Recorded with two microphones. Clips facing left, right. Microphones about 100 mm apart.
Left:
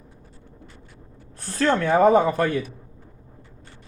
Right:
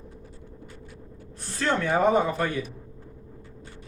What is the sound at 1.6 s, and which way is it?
Speech, 40° left (ahead or behind).